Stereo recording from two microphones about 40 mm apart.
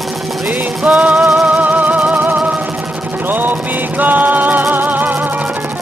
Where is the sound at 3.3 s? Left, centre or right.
Right.